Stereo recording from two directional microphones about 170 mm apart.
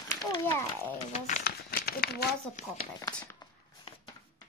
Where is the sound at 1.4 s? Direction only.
65° left (ahead or behind).